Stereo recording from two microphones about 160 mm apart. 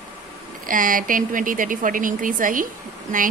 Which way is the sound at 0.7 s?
60° right (ahead or behind).